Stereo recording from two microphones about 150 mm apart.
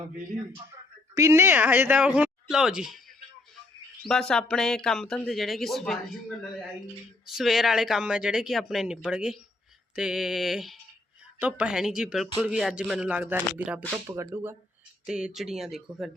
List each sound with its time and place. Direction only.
1.1 s speech: 20° right (ahead or behind)
4.0 s speech: 5° left (ahead or behind)
7.3 s speech: centre (ahead or behind); by 14.5 s 15° right (ahead or behind)
15.0 s speech: 5° right (ahead or behind)